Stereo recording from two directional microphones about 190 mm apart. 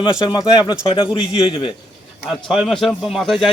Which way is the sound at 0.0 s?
20° left (ahead or behind).